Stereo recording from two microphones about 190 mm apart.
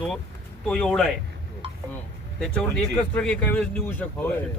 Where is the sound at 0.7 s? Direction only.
5° left (ahead or behind).